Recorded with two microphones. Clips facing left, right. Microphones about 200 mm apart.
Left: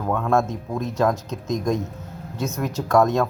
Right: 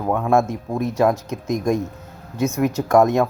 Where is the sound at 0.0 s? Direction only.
15° right (ahead or behind).